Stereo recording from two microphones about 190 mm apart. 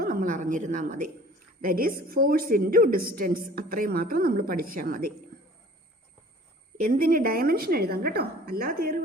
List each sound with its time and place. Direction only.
0.0 s a sound: 45° right (ahead or behind)
1.6 s a woman's voice: 50° right (ahead or behind)
6.7 s a woman's voice: 50° right (ahead or behind)